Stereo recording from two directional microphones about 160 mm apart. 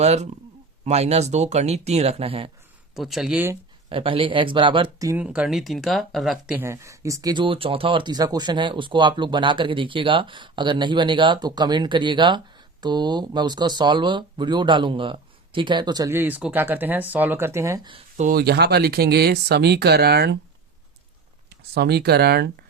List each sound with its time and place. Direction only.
0.0 s speech: 40° right (ahead or behind)
2.9 s speech: centre (ahead or behind)
3.8 s speech: 35° right (ahead or behind)
5.0 s speech: 10° right (ahead or behind)
6.6 s speech: 20° right (ahead or behind)
18.2 s speech: 70° right (ahead or behind); by 20.4 s 90° right
21.8 s speech: 85° right